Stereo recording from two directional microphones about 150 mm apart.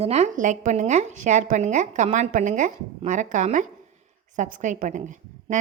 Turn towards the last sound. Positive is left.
turn(degrees=-55)  # may be behind; listen again after turning